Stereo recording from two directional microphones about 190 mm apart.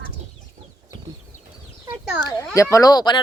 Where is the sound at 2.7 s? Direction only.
20° left (ahead or behind).